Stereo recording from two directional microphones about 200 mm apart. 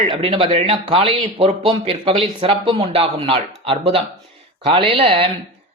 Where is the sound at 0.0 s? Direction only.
30° right (ahead or behind).